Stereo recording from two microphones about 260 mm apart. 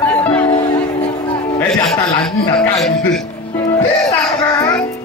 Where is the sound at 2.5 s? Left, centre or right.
Centre.